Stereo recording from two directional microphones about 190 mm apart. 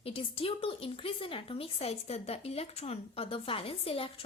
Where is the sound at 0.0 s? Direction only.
30° left (ahead or behind).